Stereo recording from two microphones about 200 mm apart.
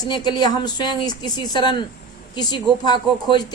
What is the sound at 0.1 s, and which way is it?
A woman's voice, 20° left (ahead or behind).